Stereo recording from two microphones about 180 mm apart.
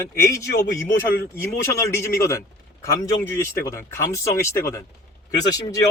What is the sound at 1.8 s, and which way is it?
Speech, 15° left (ahead or behind).